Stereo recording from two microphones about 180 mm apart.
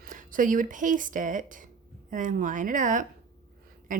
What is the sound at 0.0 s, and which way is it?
A woman's voice, 50° right (ahead or behind).